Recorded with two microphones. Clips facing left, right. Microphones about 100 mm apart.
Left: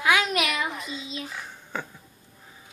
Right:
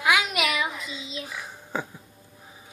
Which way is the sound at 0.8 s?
40° left (ahead or behind).